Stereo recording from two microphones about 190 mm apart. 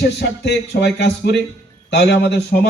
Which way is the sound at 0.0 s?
65° left (ahead or behind).